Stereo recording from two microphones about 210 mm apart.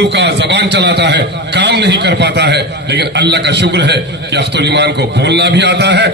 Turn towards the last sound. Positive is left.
turn(degrees=-55)  # may be behind; listen again after turning